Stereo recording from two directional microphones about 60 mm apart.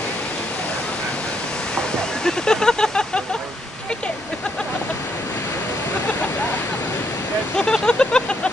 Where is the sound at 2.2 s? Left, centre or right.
Centre.